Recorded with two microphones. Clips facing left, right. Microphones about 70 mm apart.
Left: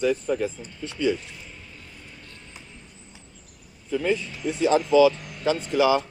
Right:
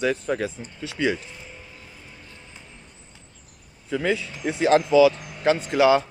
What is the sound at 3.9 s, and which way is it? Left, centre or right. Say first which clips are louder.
Speech: even; right.